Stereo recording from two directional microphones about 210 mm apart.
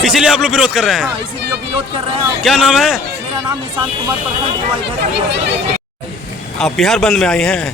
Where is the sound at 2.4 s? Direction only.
Centre (ahead or behind).